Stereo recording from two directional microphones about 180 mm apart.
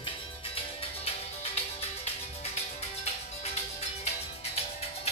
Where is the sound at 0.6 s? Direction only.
35° left (ahead or behind).